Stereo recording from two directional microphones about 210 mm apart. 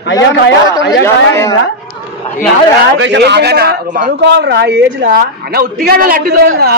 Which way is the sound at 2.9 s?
60° right (ahead or behind).